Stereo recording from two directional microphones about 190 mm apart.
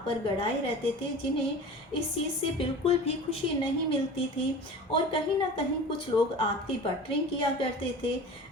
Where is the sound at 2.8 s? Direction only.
35° left (ahead or behind).